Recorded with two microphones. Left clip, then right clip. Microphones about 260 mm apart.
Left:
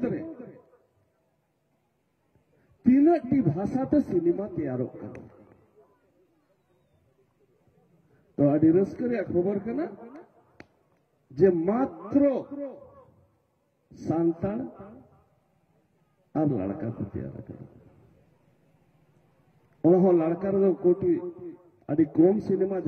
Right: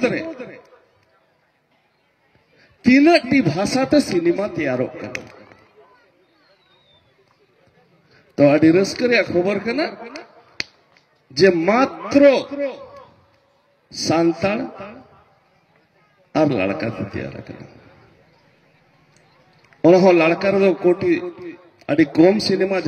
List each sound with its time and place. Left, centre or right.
2.8 s a man's voice: right
8.4 s a man's voice: right
11.4 s a man's voice: right
14.0 s a man's voice: right
16.3 s a man's voice: right
19.8 s a man's voice: right